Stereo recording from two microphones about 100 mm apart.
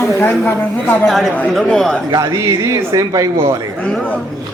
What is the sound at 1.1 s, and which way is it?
Speech, centre (ahead or behind).